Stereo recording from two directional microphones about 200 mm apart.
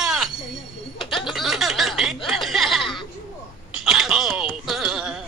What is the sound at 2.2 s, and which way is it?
Chuckle, centre (ahead or behind).